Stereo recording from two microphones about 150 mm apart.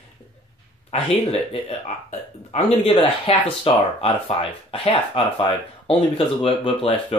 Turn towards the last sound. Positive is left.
turn(degrees=40)  # may be behind; listen again after turning